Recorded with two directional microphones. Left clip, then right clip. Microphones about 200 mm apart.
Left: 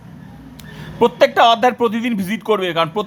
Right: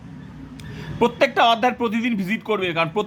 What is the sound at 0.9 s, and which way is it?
Speech, 5° left (ahead or behind).